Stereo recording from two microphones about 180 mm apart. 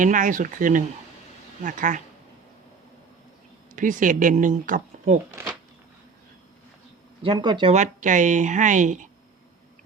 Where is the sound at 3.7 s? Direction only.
45° right (ahead or behind).